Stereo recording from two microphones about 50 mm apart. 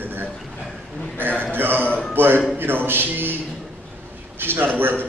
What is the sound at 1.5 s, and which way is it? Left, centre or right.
A man's voice, right.